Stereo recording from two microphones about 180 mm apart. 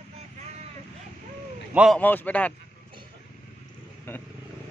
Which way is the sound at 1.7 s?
5° right (ahead or behind).